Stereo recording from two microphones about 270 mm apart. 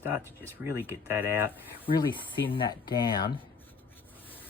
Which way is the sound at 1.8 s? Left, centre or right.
Centre.